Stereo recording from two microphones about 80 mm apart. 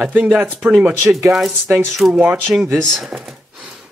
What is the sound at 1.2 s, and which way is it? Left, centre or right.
Speech, centre.